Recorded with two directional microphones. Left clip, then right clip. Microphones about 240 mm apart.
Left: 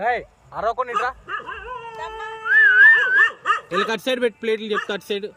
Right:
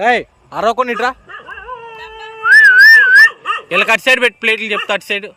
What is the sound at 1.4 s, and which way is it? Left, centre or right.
Dog, centre.